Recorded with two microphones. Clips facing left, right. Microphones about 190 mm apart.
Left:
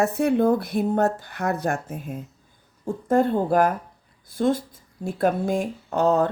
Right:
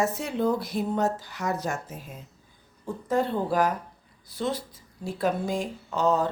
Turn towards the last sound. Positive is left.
turn(degrees=60)  # may be behind; listen again after turning